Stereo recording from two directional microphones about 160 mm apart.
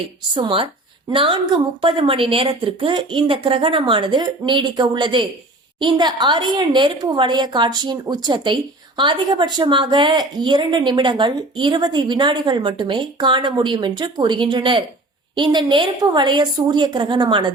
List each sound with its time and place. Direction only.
0.3 s a woman's voice: 35° right (ahead or behind)